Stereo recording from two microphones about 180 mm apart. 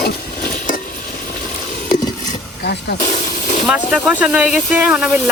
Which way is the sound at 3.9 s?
5° right (ahead or behind).